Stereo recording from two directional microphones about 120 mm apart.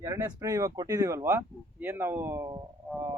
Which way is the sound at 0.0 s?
25° right (ahead or behind).